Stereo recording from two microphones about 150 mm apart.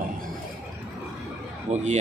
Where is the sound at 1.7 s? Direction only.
50° right (ahead or behind).